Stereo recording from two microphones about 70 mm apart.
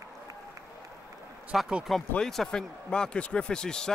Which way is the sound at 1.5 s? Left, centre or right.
Centre.